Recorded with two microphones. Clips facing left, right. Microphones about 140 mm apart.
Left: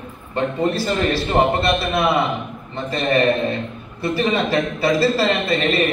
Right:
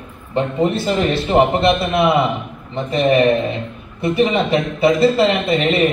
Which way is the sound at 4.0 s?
20° right (ahead or behind).